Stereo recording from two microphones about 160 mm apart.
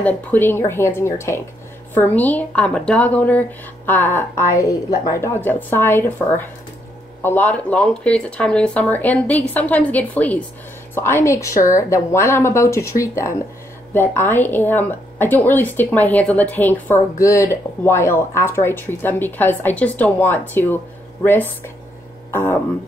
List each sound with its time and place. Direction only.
0.0 s speech: 10° left (ahead or behind)